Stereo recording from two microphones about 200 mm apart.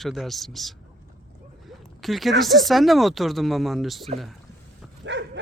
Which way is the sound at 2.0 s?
Centre (ahead or behind).